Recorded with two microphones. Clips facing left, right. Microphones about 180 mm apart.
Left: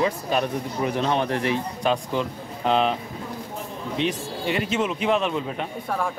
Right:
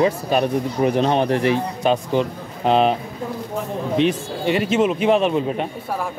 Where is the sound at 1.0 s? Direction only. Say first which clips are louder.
Right 5 dB; 35° right (ahead or behind).